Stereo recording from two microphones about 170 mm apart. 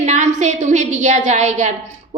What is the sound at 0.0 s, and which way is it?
A woman's voice, 45° right (ahead or behind).